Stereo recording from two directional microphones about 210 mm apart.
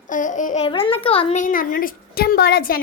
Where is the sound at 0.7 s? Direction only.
25° left (ahead or behind).